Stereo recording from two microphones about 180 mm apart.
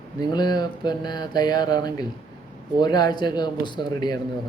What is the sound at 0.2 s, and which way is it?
Mantra, 20° left (ahead or behind).